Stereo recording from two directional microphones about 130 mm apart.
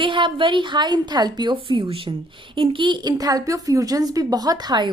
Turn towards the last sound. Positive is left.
turn(degrees=-35)  # may be behind; listen again after turning